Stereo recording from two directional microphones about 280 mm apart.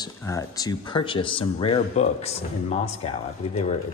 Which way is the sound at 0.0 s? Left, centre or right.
Centre.